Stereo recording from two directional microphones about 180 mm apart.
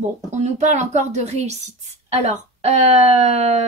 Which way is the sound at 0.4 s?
40° right (ahead or behind).